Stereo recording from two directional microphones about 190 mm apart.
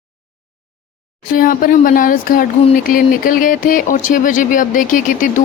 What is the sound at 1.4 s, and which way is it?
Speech, 45° left (ahead or behind).